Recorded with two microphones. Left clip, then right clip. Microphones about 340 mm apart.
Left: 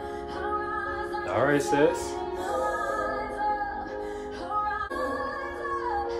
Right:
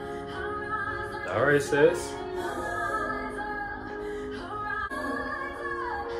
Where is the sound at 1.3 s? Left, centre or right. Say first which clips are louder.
Even; left.